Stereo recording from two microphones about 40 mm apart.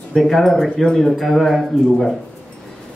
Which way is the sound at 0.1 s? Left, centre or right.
Centre.